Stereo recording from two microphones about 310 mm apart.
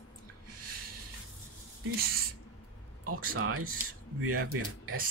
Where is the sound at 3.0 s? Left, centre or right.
Right.